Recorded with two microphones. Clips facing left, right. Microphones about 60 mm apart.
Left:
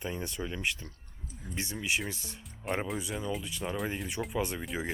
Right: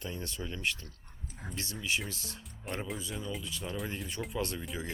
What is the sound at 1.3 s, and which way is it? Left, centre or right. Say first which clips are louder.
Speech: even; right.